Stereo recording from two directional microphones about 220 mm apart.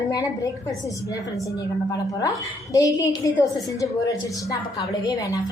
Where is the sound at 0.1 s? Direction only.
15° left (ahead or behind).